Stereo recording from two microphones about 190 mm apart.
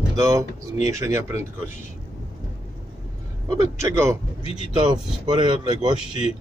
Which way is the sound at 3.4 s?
15° right (ahead or behind).